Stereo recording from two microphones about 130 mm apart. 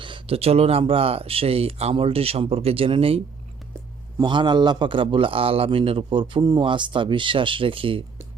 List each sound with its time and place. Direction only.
0.0 s speech: 45° right (ahead or behind)
4.2 s a man's voice: 35° right (ahead or behind)